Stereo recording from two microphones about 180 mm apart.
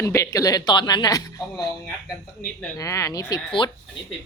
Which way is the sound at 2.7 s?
15° left (ahead or behind).